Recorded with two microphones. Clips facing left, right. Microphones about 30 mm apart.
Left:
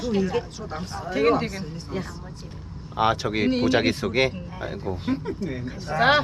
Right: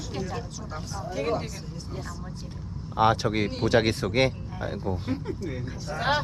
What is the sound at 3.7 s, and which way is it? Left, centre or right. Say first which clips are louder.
Speech: left 1 dB; left.